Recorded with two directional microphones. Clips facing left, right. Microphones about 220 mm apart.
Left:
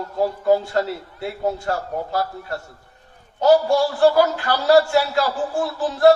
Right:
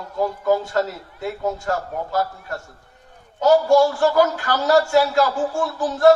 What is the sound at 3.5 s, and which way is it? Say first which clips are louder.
A man's voice: right 1 dB; 45° right (ahead or behind).